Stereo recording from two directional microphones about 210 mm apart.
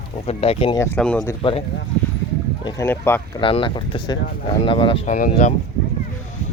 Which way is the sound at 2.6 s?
10° left (ahead or behind).